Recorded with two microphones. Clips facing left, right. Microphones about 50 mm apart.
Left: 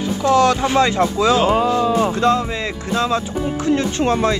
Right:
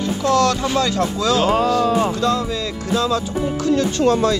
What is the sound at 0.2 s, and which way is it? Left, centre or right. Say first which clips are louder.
Speech: left 3 dB; left.